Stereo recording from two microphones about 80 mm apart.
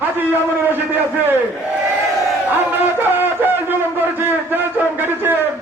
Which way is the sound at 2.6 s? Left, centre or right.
Right.